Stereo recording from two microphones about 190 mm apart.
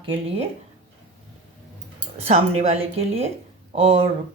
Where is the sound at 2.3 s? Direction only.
30° right (ahead or behind).